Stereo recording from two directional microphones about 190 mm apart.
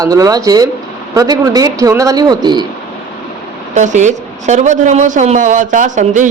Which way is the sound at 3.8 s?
40° right (ahead or behind).